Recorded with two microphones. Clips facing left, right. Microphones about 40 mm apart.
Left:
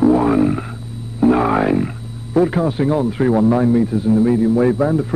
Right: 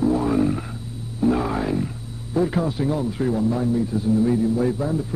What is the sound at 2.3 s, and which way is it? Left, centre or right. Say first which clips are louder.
Speech: left 6 dB; left.